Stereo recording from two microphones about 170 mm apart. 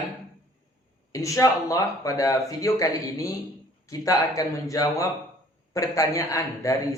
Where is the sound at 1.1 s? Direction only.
20° left (ahead or behind).